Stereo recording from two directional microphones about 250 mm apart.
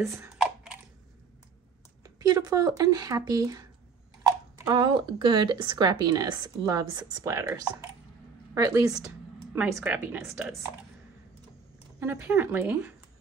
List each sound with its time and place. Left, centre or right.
0.0 s a sound: centre
2.0 s speech: centre
4.6 s speech: centre
12.0 s speech: centre